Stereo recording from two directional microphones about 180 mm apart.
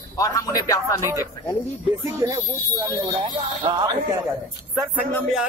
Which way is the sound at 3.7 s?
30° right (ahead or behind).